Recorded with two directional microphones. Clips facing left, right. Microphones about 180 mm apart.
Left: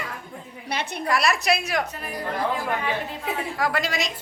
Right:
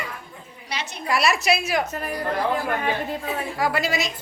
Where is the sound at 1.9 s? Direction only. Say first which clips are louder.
Right 6 dB; 45° right (ahead or behind).